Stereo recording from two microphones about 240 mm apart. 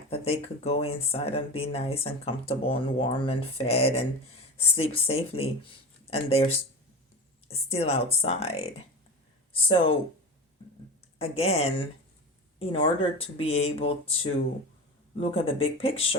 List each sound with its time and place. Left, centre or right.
0.1 s speech: left
11.2 s speech: left